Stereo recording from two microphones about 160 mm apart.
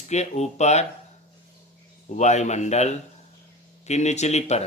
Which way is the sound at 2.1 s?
45° left (ahead or behind).